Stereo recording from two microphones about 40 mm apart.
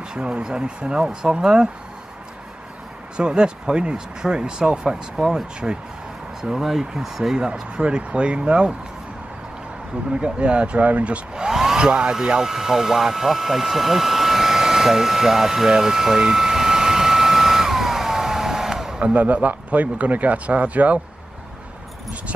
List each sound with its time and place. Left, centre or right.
0.1 s speech: centre
3.2 s speech: right
7.3 s speech: right
10.2 s a man's voice: right
11.3 s hair dryer: centre
11.8 s a sound: right
18.9 s a man's voice: right